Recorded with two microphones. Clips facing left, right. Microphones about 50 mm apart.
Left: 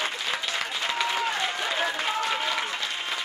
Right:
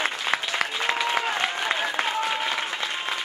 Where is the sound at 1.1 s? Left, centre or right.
Centre.